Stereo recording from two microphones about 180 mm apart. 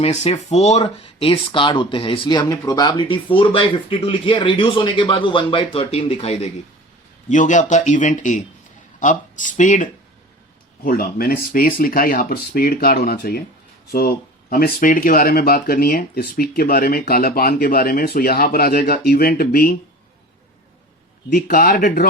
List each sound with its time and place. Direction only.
0.0 s speech: 35° left (ahead or behind)
7.3 s speech: 45° left (ahead or behind)
10.8 s speech: 55° left (ahead or behind)
21.3 s speech: 50° left (ahead or behind)